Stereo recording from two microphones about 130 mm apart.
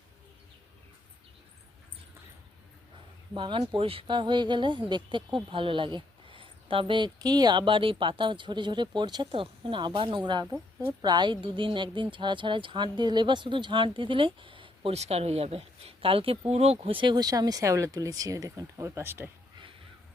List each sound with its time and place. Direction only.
3.3 s speech: 40° right (ahead or behind)
10.4 s a woman's voice: 20° right (ahead or behind)
11.0 s speech: 35° right (ahead or behind); by 19.3 s 15° right (ahead or behind)